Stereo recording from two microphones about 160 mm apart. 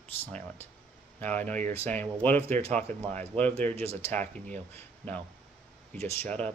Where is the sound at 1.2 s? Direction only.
10° left (ahead or behind).